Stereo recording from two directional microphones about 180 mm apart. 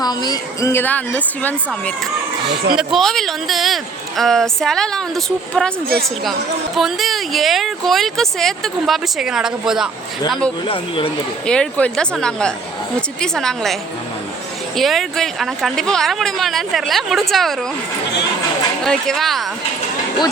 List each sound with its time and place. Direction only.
0.0 s a woman's voice: 20° left (ahead or behind); by 5.7 s 5° left (ahead or behind)
6.7 s speech: centre (ahead or behind)
10.7 s speech: 30° left (ahead or behind)
11.4 s speech: 5° left (ahead or behind)
14.8 s speech: centre (ahead or behind)
18.9 s speech: centre (ahead or behind)